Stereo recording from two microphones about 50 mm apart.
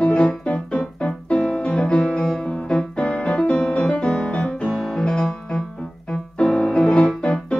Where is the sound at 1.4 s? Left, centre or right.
Left.